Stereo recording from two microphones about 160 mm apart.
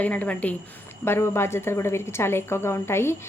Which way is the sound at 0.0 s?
10° left (ahead or behind).